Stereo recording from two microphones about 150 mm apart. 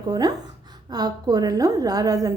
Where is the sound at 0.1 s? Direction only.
25° right (ahead or behind).